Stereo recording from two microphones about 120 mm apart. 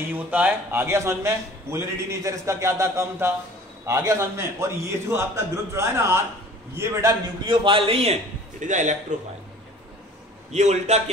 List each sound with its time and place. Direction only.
0.1 s a man's voice: 15° right (ahead or behind)
7.4 s a man's voice: 45° right (ahead or behind); by 8.9 s 90° right
10.5 s a man's voice: 70° right (ahead or behind)